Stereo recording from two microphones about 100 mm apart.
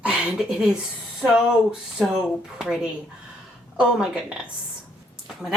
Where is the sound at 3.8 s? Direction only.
10° right (ahead or behind).